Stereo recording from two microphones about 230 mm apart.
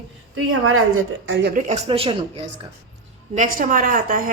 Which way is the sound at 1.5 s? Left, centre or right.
Right.